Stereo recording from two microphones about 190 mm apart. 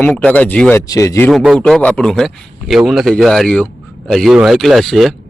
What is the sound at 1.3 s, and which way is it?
A man's voice, centre (ahead or behind).